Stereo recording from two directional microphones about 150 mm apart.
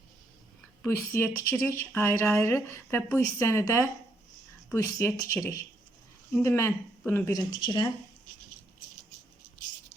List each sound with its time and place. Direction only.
0.9 s a woman's voice: 15° left (ahead or behind)